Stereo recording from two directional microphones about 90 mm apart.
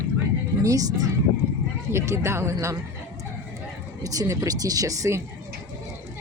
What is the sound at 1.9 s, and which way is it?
Speech, 30° right (ahead or behind).